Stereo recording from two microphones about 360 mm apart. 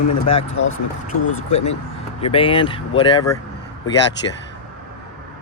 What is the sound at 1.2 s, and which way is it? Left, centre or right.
Speech, left.